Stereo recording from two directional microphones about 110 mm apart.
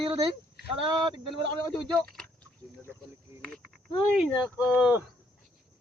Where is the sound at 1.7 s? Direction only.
5° left (ahead or behind).